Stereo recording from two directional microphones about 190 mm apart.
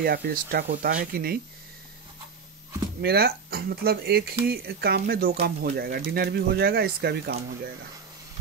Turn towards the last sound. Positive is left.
turn(degrees=-55)  # may be behind; listen again after turning